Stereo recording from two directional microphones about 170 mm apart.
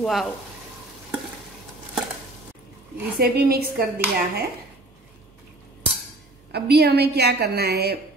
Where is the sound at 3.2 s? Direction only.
65° right (ahead or behind).